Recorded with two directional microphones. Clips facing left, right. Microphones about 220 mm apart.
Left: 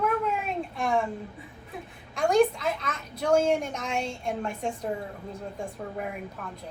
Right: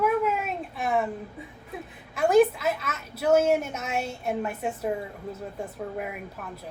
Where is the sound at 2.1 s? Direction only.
5° right (ahead or behind).